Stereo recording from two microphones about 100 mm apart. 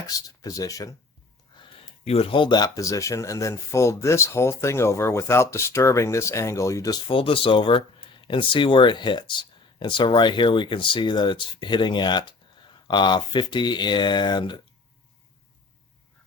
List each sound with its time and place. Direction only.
0.1 s speech: 35° left (ahead or behind)
2.0 s speech: 80° left; by 2.6 s 50° left (ahead or behind)
2.6 s speech: 35° left (ahead or behind)
7.1 s speech: 60° left (ahead or behind)